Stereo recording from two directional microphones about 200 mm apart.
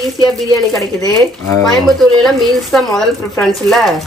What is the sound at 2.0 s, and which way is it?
Speech, centre (ahead or behind).